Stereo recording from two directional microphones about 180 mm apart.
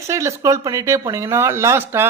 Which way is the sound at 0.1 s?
15° right (ahead or behind).